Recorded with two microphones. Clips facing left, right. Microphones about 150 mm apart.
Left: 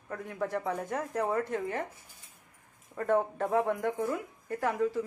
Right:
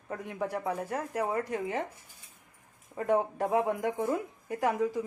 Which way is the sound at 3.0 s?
15° right (ahead or behind).